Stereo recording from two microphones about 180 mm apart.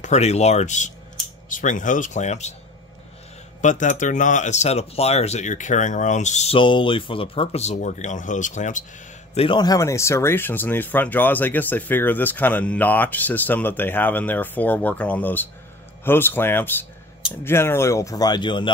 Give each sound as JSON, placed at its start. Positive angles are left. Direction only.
{"t": 0.0, "sound": "speech", "side_deg": 40}
{"t": 3.6, "sound": "speech", "side_deg": 45}
{"t": 9.3, "sound": "speech", "side_deg": 30}